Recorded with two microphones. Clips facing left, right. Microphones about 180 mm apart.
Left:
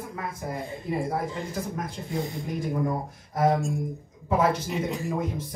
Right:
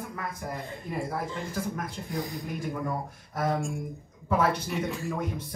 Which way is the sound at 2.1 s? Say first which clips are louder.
Left 3 dB; 25° left (ahead or behind).